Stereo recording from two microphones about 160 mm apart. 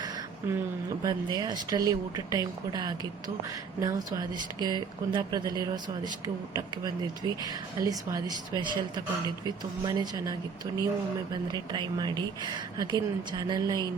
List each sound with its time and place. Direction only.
0.0 s a sound: 15° right (ahead or behind)
1.0 s speech: 25° right (ahead or behind)
11.5 s speech: 25° right (ahead or behind)